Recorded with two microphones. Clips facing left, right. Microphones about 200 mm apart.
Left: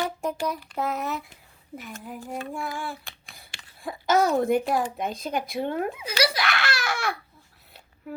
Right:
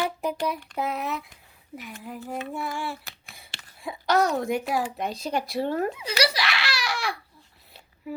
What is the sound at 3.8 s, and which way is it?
Speech, 5° left (ahead or behind).